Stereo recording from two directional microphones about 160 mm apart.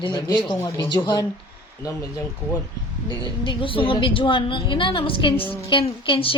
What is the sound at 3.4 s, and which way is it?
A woman's voice, 35° left (ahead or behind).